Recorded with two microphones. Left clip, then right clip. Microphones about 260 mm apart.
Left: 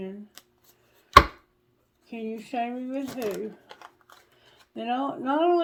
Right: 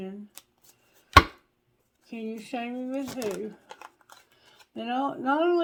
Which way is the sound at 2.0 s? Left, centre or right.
Right.